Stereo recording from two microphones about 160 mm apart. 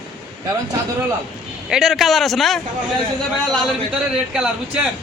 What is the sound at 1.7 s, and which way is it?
Speech, 5° right (ahead or behind).